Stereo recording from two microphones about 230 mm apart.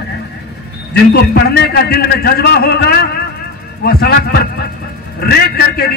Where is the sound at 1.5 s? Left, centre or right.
Left.